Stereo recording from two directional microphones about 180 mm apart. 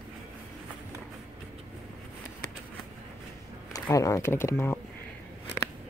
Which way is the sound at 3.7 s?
20° left (ahead or behind).